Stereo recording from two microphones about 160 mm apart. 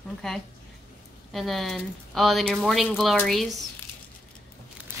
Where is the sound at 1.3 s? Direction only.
Centre (ahead or behind).